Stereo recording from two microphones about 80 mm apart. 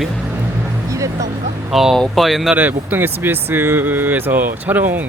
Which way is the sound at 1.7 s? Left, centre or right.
Centre.